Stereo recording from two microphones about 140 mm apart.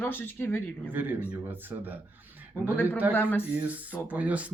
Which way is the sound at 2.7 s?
15° left (ahead or behind).